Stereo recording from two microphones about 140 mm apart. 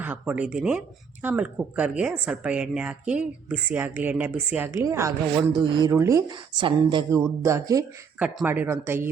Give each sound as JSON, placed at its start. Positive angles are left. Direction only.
{"t": 0.0, "sound": "a woman's voice", "side_deg": -10}
{"t": 5.4, "sound": "speech", "side_deg": -35}
{"t": 5.9, "sound": "speech", "side_deg": -20}
{"t": 6.6, "sound": "speech", "side_deg": -35}
{"t": 7.1, "sound": "speech", "side_deg": -20}
{"t": 8.2, "sound": "a woman's voice", "side_deg": -10}